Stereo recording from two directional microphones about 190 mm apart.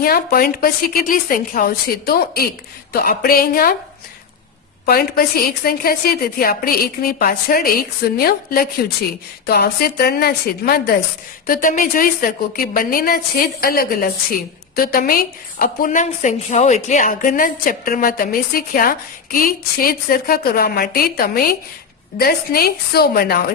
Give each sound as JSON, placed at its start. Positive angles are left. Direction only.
{"t": 0.0, "sound": "a woman's voice", "side_deg": 50}
{"t": 4.9, "sound": "a woman's voice", "side_deg": 50}